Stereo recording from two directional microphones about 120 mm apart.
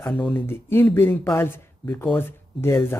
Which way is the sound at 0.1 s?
15° left (ahead or behind).